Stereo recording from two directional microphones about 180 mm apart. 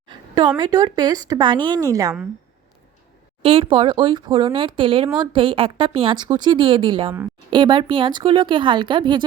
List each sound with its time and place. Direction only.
0.1 s a sound: 25° right (ahead or behind)
0.6 s a woman's voice: 25° right (ahead or behind)
3.4 s a woman's voice: 30° right (ahead or behind)